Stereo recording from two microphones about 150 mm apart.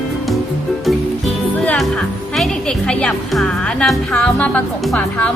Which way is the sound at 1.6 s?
Centre (ahead or behind).